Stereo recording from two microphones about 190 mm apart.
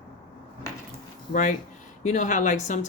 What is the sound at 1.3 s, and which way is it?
Speech, 40° left (ahead or behind).